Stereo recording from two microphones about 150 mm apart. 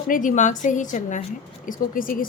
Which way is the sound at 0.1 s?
60° left (ahead or behind).